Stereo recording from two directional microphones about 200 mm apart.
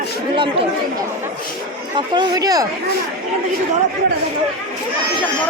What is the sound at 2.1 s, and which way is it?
Speech, 20° right (ahead or behind).